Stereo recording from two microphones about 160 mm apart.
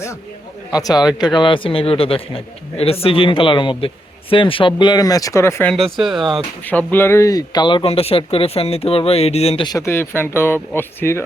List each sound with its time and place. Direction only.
0.7 s speech: 25° left (ahead or behind)
6.0 s speech: centre (ahead or behind); by 9.6 s 40° left (ahead or behind)
9.6 s speech: 20° left (ahead or behind)